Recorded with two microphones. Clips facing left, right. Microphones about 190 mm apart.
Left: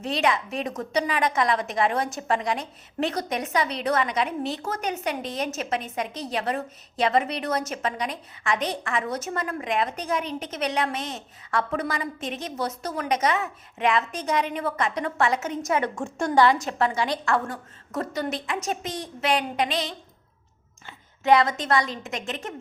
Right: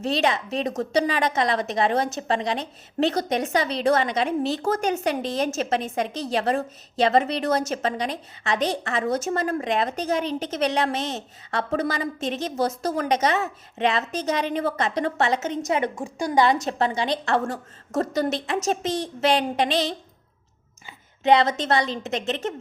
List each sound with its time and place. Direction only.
0.0 s a woman's voice: 30° right (ahead or behind)
17.9 s a woman's voice: 40° right (ahead or behind)
21.2 s a woman's voice: 25° right (ahead or behind)